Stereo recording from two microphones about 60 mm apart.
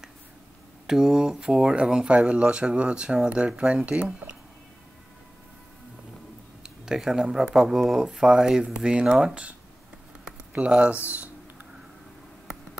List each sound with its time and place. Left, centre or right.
0.8 s speech: centre
6.6 s speech: centre